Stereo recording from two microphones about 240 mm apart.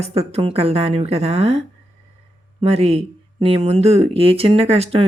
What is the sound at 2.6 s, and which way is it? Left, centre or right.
Speech, right.